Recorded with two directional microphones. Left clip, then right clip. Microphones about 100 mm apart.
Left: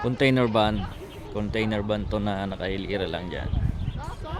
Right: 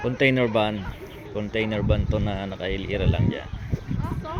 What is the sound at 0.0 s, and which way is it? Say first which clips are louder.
Speech: right 1 dB; 35° left (ahead or behind).